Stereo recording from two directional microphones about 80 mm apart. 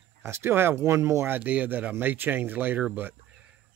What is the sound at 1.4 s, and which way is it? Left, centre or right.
Speech, centre.